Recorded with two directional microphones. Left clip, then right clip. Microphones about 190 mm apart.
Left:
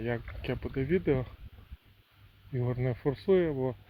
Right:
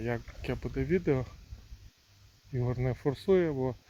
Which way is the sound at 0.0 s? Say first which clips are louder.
Left 1 dB; 10° right (ahead or behind).